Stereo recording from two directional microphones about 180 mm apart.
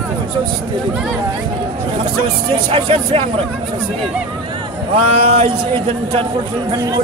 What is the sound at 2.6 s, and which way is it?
Speech, 30° right (ahead or behind).